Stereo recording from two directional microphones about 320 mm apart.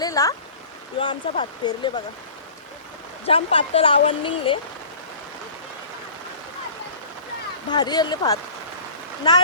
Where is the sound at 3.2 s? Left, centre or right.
Centre.